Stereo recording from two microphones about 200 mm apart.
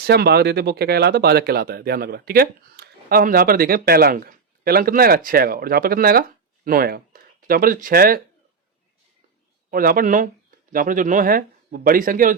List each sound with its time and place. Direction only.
0.0 s speech: 55° right (ahead or behind)
9.6 s speech: 45° right (ahead or behind)